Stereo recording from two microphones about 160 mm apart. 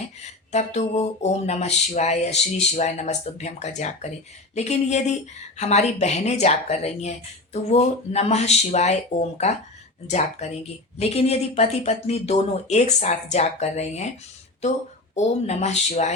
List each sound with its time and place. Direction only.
0.5 s speech: 45° left (ahead or behind)
10.1 s speech: 45° left (ahead or behind)
15.1 s speech: 45° left (ahead or behind)